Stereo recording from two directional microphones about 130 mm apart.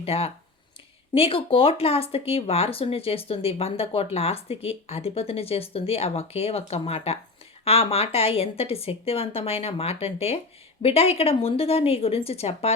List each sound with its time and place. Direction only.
0.0 s speech: 50° left (ahead or behind)